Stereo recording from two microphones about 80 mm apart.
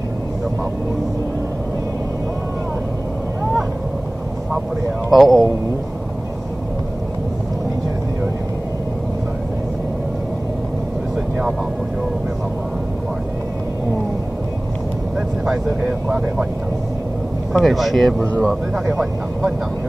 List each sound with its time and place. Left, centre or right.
5.1 s speech: centre
15.1 s vehicle: centre
17.5 s speech: centre
18.2 s speech: right
18.5 s speech: centre